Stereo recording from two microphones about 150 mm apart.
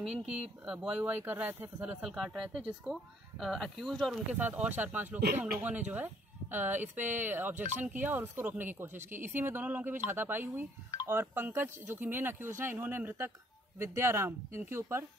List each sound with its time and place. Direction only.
0.0 s speech: 5° right (ahead or behind)
4.3 s speech: 10° right (ahead or behind)